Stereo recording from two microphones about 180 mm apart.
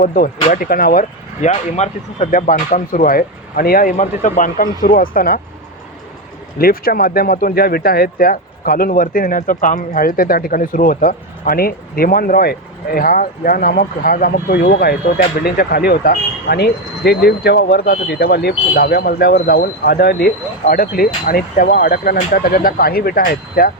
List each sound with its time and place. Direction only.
0.0 s speech: 50° left (ahead or behind)
1.5 s speech: 35° left (ahead or behind); by 5.4 s 55° left (ahead or behind)
6.6 s speech: 55° left (ahead or behind)